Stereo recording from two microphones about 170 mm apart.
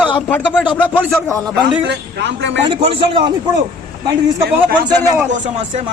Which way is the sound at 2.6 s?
30° right (ahead or behind).